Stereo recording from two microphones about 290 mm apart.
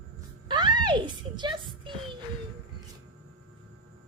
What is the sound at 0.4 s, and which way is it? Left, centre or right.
Music, centre.